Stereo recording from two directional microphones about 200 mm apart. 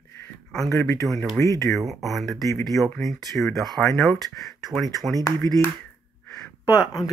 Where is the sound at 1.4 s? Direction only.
15° left (ahead or behind).